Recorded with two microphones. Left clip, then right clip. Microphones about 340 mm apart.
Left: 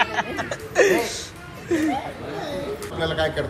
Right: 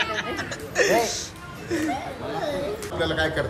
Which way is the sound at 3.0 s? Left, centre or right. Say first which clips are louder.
Left 1 dB; right.